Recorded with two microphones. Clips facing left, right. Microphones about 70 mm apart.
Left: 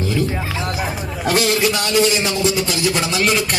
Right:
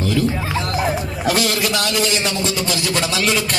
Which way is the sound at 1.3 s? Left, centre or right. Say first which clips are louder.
Left 2 dB; left.